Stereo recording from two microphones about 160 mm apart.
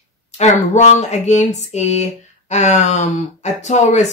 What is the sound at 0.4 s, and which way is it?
Speech, 45° left (ahead or behind).